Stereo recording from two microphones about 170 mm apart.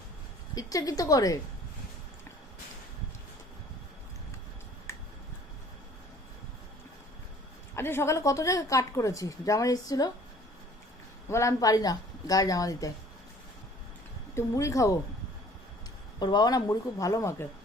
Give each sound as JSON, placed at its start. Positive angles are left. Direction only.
{"t": 0.5, "sound": "a woman's voice", "side_deg": 20}
{"t": 4.9, "sound": "a sound", "side_deg": 15}
{"t": 7.8, "sound": "a woman's voice", "side_deg": 15}
{"t": 11.3, "sound": "a woman's voice", "side_deg": 15}
{"t": 14.3, "sound": "a woman's voice", "side_deg": 20}
{"t": 16.2, "sound": "a woman's voice", "side_deg": 25}